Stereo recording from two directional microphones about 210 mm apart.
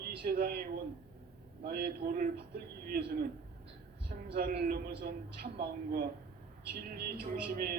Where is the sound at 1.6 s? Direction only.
50° right (ahead or behind).